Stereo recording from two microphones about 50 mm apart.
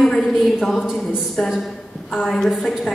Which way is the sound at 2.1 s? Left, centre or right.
Centre.